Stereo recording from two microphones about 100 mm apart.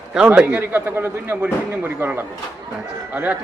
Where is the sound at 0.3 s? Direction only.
15° right (ahead or behind).